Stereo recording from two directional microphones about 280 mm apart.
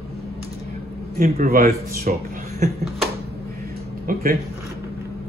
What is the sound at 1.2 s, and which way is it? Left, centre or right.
Speech, right.